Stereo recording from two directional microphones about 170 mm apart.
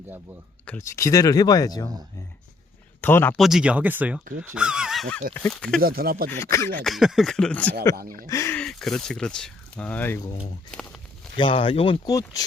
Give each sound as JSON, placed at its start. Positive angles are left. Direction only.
{"t": 0.6, "sound": "speech", "side_deg": 10}
{"t": 3.0, "sound": "speech", "side_deg": 10}
{"t": 3.3, "sound": "speech", "side_deg": 0}
{"t": 5.8, "sound": "speech", "side_deg": -60}
{"t": 6.3, "sound": "speech", "side_deg": 15}
{"t": 6.8, "sound": "speech", "side_deg": 0}
{"t": 8.5, "sound": "speech", "side_deg": 5}
{"t": 11.3, "sound": "speech", "side_deg": 30}
{"t": 12.0, "sound": "speech", "side_deg": 20}